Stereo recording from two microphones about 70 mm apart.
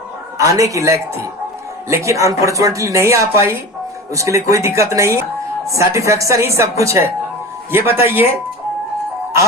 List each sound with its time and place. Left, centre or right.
0.3 s a woman's voice: right